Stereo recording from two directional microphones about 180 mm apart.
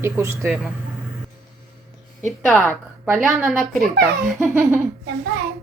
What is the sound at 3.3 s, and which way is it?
Speech, 10° right (ahead or behind).